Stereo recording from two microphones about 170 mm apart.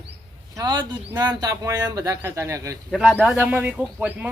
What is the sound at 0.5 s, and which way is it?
Speech, 25° right (ahead or behind).